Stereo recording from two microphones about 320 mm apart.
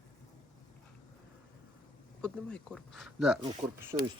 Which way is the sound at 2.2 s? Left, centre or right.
Centre.